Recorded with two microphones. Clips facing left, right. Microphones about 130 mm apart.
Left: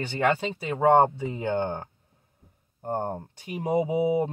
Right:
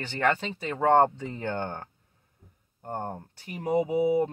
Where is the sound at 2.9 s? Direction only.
25° left (ahead or behind).